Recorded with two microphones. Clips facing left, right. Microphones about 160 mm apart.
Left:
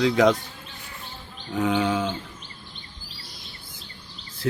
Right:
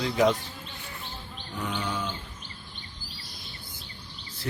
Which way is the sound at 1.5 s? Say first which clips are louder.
Left 10 dB; 90° left.